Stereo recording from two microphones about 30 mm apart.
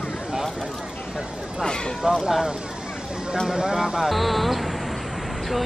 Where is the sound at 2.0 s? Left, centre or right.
Right.